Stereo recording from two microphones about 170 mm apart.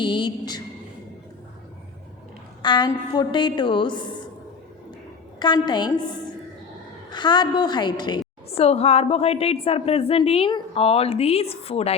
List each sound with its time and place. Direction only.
0.0 s a woman's voice: 25° left (ahead or behind)
2.6 s a woman's voice: 25° left (ahead or behind)
5.4 s a woman's voice: 25° left (ahead or behind)
7.1 s a woman's voice: 25° left (ahead or behind)
8.4 s a woman's voice: 35° left (ahead or behind)